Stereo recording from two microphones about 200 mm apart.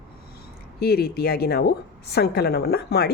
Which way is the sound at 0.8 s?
50° left (ahead or behind).